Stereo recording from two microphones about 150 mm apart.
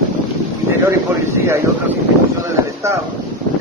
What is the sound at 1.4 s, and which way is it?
Speech, 20° right (ahead or behind).